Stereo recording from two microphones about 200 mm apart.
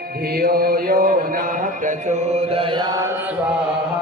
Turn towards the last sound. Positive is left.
turn(degrees=-20)  # may be behind; listen again after turning